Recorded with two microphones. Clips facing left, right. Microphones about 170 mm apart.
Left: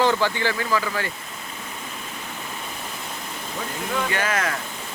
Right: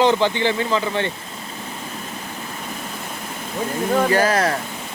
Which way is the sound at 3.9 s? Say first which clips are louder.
Right 8 dB; 40° right (ahead or behind).